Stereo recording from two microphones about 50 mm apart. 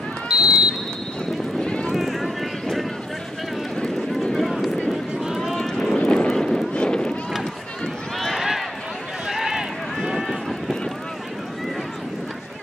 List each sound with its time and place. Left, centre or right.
0.4 s run: centre
1.6 s run: centre
2.0 s clip-clop: centre
4.4 s run: centre
5.6 s boat: centre
5.9 s vehicle: centre
6.3 s a sound: centre
6.7 s run: centre
8.2 s run: centre
9.3 s a sound: centre